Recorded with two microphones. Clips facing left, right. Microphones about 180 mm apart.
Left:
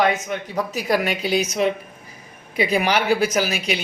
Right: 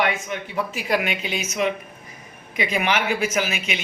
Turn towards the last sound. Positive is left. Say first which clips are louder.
# left 3 dB
turn(degrees=35)  # may be behind; listen again after turning